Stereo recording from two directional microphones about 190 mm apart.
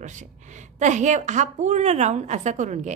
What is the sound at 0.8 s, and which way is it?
A woman's voice, 40° right (ahead or behind).